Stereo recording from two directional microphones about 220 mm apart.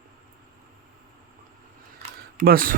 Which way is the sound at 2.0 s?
40° right (ahead or behind).